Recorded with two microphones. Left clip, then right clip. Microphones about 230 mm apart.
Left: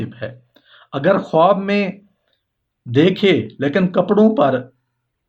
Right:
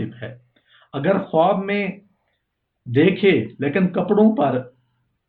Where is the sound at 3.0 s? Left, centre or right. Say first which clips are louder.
Left 2 dB; left.